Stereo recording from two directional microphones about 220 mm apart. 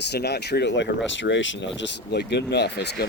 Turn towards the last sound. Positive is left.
turn(degrees=50)  # may be behind; listen again after turning